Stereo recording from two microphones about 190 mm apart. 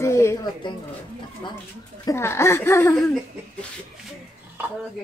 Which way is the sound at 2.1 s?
15° left (ahead or behind).